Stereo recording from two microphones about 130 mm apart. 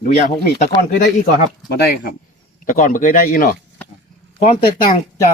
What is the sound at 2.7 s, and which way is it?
Speech, 85° left.